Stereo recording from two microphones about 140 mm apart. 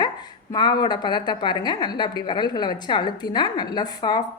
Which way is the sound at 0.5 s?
30° left (ahead or behind).